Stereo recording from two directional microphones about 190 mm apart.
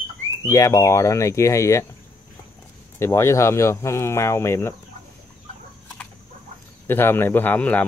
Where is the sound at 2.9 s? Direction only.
15° left (ahead or behind).